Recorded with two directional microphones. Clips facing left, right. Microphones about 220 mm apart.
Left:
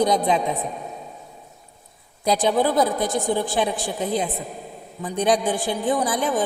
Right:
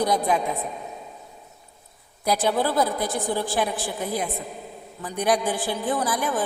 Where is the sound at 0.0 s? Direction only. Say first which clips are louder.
Left 3 dB; 20° left (ahead or behind).